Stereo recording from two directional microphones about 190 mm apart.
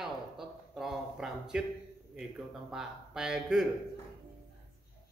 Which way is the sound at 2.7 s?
Centre (ahead or behind).